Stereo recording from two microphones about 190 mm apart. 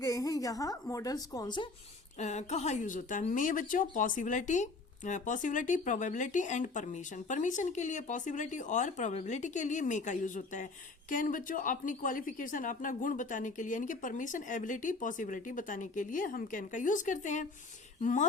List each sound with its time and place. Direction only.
0.0 s a woman's voice: 20° left (ahead or behind)
2.1 s a woman's voice: 35° left (ahead or behind)